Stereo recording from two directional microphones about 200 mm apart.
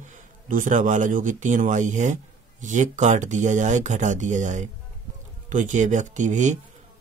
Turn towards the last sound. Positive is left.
turn(degrees=-40)  # may be behind; listen again after turning